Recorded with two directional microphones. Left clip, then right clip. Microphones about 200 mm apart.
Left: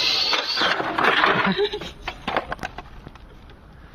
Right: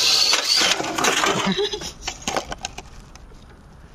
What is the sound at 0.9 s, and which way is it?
Sewing machine, 55° right (ahead or behind).